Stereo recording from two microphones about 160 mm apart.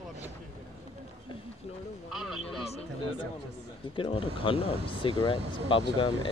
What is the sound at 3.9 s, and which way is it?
Speech, 30° left (ahead or behind).